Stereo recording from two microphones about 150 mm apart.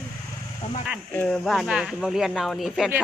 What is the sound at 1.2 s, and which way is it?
Speech, centre (ahead or behind).